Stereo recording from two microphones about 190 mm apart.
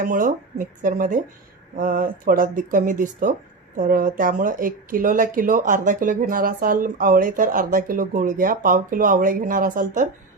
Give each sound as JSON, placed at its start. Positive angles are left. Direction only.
{"t": 0.0, "sound": "speech", "side_deg": -45}